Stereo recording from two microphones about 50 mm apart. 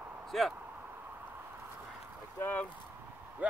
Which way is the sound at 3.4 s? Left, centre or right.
Right.